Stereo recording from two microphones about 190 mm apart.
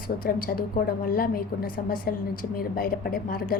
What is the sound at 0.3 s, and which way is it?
A woman's voice, 50° left (ahead or behind).